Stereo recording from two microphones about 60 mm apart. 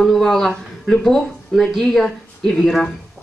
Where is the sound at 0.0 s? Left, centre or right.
Centre.